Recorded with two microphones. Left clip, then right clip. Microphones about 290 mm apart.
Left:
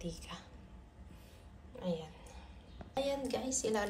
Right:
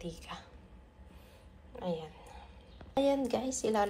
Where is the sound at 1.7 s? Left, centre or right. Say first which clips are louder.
Right 3 dB; centre.